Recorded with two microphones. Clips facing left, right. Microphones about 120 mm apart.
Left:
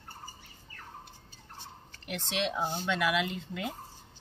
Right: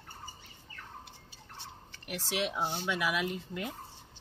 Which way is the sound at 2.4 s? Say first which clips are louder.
Left 2 dB; 5° right (ahead or behind).